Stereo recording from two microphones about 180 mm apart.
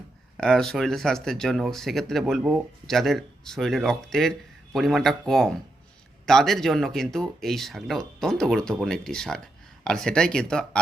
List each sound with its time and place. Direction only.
0.3 s speech: 5° left (ahead or behind)